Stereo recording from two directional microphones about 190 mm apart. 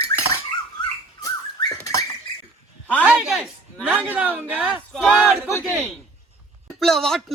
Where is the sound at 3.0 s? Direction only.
5° right (ahead or behind).